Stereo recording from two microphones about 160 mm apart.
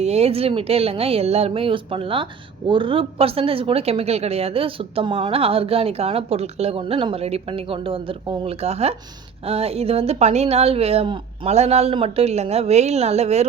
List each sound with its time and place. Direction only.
0.0 s a woman's voice: 40° right (ahead or behind)